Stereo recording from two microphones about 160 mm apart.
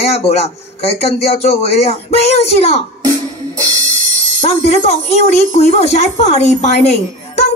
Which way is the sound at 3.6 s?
20° right (ahead or behind).